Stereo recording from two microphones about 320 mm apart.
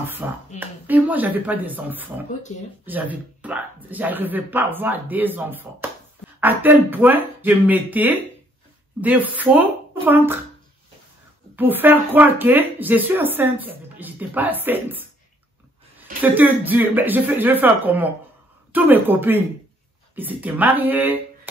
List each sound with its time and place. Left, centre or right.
0.0 s speech: centre
11.5 s speech: centre
16.2 s a woman's voice: centre